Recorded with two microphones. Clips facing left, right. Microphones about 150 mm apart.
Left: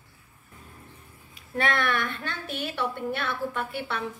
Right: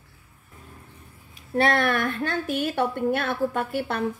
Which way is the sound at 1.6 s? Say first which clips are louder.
Right 5 dB; 40° right (ahead or behind).